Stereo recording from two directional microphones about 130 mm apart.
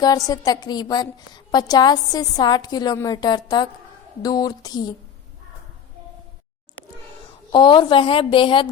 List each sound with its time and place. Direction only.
0.0 s a woman's voice: 30° left (ahead or behind)
7.5 s a woman's voice: 35° left (ahead or behind)